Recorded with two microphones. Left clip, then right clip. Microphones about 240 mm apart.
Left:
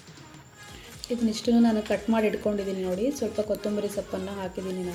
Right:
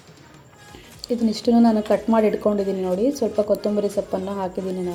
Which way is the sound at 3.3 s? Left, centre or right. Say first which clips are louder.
Right 8 dB; centre.